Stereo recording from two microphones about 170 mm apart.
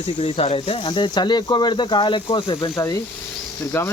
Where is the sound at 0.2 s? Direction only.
35° left (ahead or behind).